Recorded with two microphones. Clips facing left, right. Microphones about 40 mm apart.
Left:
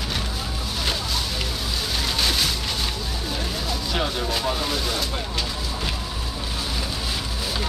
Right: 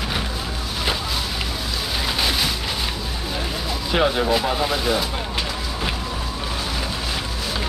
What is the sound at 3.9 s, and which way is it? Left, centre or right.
Speech, right.